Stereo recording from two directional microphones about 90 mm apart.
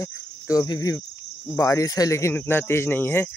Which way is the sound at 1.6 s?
35° left (ahead or behind).